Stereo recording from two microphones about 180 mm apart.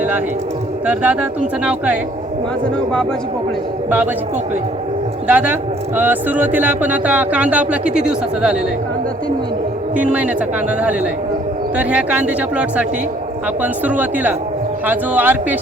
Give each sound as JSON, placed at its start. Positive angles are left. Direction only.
{"t": 0.9, "sound": "speech", "side_deg": -10}
{"t": 3.8, "sound": "speech", "side_deg": -10}
{"t": 5.3, "sound": "speech", "side_deg": -10}
{"t": 9.9, "sound": "speech", "side_deg": -10}
{"t": 11.8, "sound": "speech", "side_deg": -5}
{"t": 14.8, "sound": "speech", "side_deg": -10}